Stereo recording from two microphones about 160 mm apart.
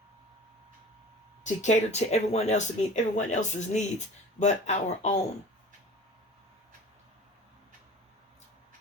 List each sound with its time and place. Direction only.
1.5 s speech: 45° left (ahead or behind)